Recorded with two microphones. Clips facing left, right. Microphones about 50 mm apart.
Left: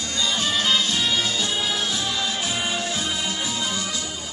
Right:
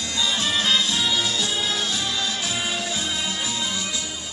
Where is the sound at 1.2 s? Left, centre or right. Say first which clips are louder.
Even; centre.